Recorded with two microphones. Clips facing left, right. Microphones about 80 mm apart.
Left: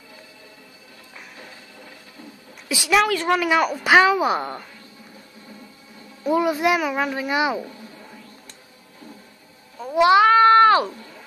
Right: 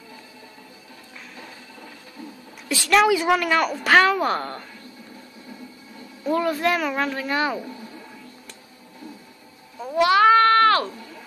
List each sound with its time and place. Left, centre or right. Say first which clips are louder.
2.7 s speech: even; centre
3.1 s speech: right 2 dB; centre
3.4 s speech: left 1 dB; centre
6.2 s speech: left 2 dB; centre
9.9 s speech: left 3 dB; left
10.4 s a sound: left 3 dB; centre